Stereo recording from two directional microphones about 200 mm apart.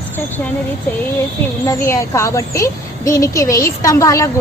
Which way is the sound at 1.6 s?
15° left (ahead or behind).